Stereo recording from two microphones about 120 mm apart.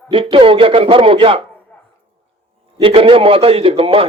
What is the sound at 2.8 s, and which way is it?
Speech, 50° right (ahead or behind).